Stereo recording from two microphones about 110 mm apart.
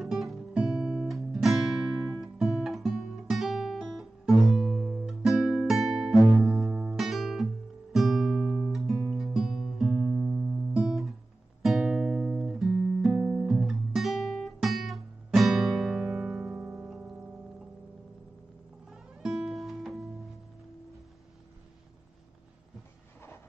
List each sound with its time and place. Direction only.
0.0 s music: centre (ahead or behind)
18.9 s music: 5° right (ahead or behind)